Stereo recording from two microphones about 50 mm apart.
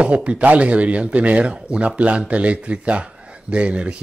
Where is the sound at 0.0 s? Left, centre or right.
Right.